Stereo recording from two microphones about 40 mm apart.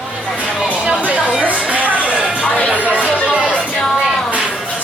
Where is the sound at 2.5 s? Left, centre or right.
Left.